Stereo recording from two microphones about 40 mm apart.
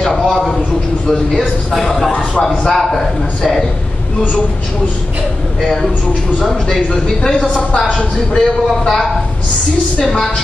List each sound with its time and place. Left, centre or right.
1.8 s a man's voice: centre
7.2 s a woman's voice: left
8.4 s a man's voice: centre